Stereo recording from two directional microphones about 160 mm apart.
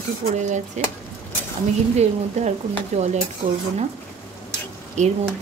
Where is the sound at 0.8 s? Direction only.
45° right (ahead or behind).